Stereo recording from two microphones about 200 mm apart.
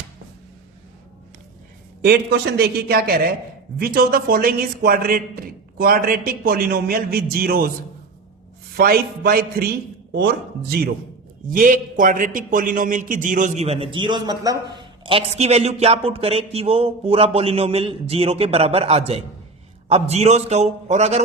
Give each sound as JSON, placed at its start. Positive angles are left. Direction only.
{"t": 2.0, "sound": "a man's voice", "side_deg": -55}
{"t": 8.7, "sound": "a man's voice", "side_deg": -50}